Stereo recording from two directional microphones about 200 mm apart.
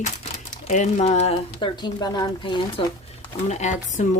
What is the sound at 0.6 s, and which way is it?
A woman's voice, 35° left (ahead or behind).